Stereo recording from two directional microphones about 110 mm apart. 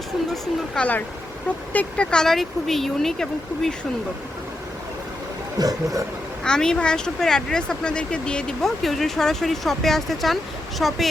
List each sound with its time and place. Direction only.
0.7 s speech: 15° left (ahead or behind)
5.5 s speech: 35° right (ahead or behind)
6.4 s speech: 5° left (ahead or behind)